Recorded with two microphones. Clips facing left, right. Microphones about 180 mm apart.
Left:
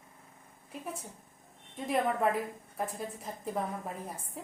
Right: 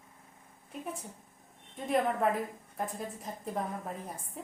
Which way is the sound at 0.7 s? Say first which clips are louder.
Right 1 dB; centre (ahead or behind).